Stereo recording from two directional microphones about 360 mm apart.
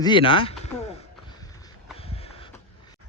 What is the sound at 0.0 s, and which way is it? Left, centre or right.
Bird, centre.